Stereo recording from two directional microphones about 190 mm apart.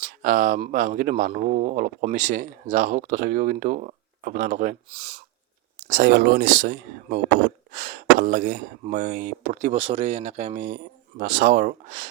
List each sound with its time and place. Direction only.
0.0 s speech: 45° right (ahead or behind)